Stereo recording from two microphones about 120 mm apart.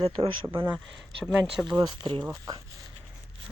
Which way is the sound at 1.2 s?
5° right (ahead or behind).